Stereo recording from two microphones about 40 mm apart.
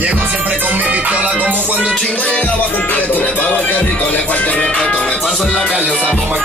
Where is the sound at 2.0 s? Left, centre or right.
Left.